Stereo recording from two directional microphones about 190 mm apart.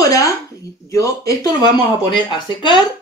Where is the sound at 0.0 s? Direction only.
20° left (ahead or behind).